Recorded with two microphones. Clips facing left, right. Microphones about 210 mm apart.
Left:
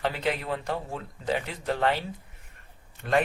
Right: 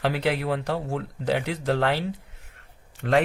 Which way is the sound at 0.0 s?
75° right (ahead or behind).